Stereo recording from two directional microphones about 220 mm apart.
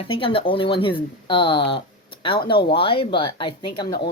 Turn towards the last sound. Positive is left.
turn(degrees=20)  # may be behind; listen again after turning